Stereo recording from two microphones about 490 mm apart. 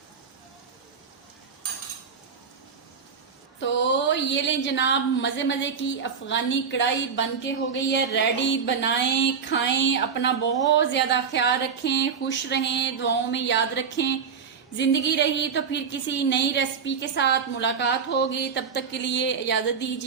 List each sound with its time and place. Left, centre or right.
3.6 s a woman's voice: left